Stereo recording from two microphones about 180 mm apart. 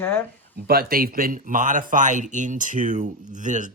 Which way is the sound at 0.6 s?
55° right (ahead or behind).